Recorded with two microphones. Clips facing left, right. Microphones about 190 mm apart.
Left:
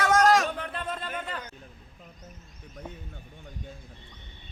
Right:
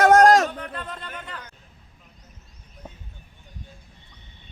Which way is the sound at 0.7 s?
20° left (ahead or behind).